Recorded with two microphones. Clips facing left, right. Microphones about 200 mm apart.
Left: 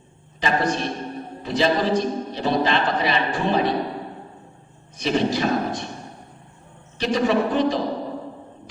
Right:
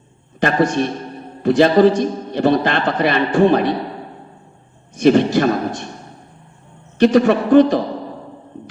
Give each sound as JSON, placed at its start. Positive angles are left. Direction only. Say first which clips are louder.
{"t": 0.3, "sound": "a man's voice", "louder": "right 6 dB", "side_deg": -50}
{"t": 4.9, "sound": "a man's voice", "louder": "right 9 dB", "side_deg": -55}
{"t": 7.0, "sound": "a man's voice", "louder": "right 7 dB", "side_deg": -55}